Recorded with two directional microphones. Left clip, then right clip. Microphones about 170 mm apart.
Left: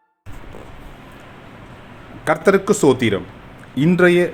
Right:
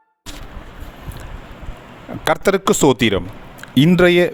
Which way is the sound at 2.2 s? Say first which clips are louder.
Even; 55° right (ahead or behind).